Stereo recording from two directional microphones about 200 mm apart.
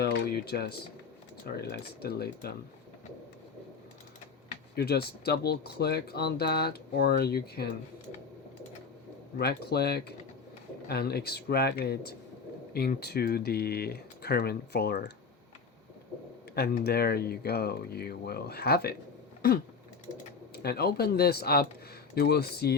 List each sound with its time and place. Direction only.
0.0 s a sound: 50° left (ahead or behind)
1.6 s speech: 55° left (ahead or behind)
4.7 s speech: 55° left (ahead or behind)
9.4 s speech: 55° left (ahead or behind)
16.6 s speech: 55° left (ahead or behind)
20.5 s speech: 50° left (ahead or behind)